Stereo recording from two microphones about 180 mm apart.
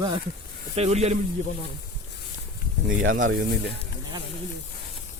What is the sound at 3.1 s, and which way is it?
Speech, 50° right (ahead or behind).